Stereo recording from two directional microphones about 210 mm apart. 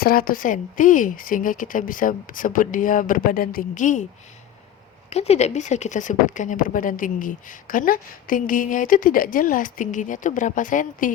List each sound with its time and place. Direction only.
0.0 s speech: 45° left (ahead or behind)
5.0 s speech: 30° left (ahead or behind)